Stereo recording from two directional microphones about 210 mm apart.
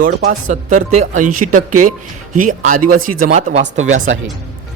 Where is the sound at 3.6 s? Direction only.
70° right (ahead or behind).